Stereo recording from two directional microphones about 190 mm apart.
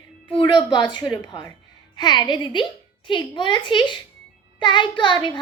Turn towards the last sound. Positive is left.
turn(degrees=25)  # may be behind; listen again after turning